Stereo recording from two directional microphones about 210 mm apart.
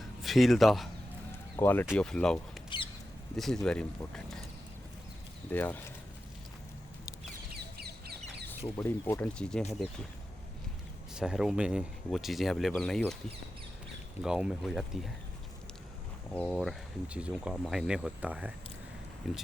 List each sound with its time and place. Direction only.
0.2 s speech: centre (ahead or behind)
2.6 s a sound: 25° left (ahead or behind)
3.3 s speech: centre (ahead or behind)
5.5 s speech: 10° left (ahead or behind)
7.5 s chicken: 50° right (ahead or behind)
8.4 s speech: 10° left (ahead or behind)
11.1 s speech: 5° right (ahead or behind)
14.2 s speech: 5° right (ahead or behind)
16.3 s speech: 5° left (ahead or behind)
16.6 s speech: 5° right (ahead or behind)